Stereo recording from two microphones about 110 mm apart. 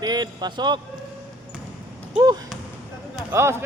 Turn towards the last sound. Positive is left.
turn(degrees=-25)  # may be behind; listen again after turning